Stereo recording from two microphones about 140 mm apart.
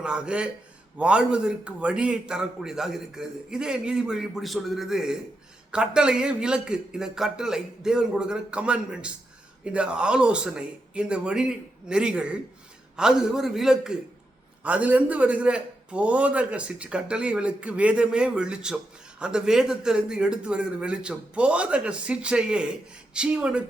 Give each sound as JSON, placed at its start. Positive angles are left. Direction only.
{"t": 0.0, "sound": "a man's voice", "side_deg": -5}